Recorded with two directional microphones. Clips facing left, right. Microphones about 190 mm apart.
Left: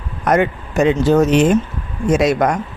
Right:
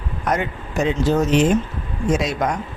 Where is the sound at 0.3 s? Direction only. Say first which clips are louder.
Left 7 dB; 70° left (ahead or behind).